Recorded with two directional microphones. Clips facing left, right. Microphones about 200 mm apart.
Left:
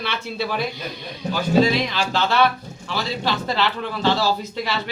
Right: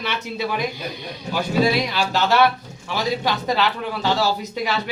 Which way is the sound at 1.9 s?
10° right (ahead or behind).